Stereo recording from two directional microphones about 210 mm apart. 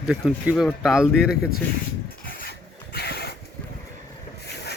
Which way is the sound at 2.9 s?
50° left (ahead or behind).